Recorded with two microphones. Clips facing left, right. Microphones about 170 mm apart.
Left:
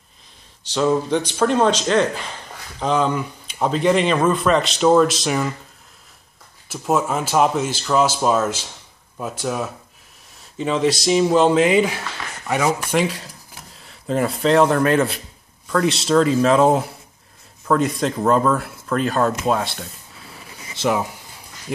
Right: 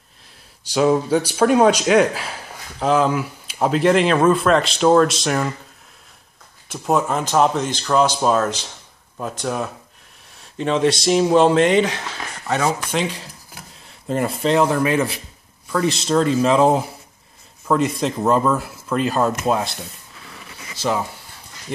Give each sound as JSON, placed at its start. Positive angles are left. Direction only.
{"t": 0.7, "sound": "speech", "side_deg": -10}
{"t": 6.7, "sound": "speech", "side_deg": 5}
{"t": 20.6, "sound": "a sound", "side_deg": 20}
{"t": 21.7, "sound": "speech", "side_deg": 5}